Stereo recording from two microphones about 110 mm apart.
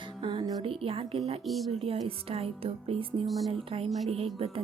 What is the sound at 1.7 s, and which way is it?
Speech, 70° right (ahead or behind).